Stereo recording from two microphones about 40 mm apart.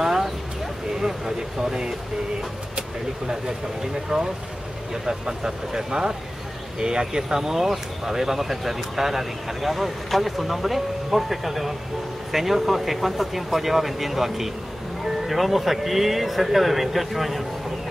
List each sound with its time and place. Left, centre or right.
0.0 s a sound: centre
1.0 s speech: centre
3.8 s speech: centre